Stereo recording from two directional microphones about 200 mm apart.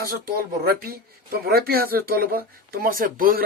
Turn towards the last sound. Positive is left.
turn(degrees=-45)  # may be behind; listen again after turning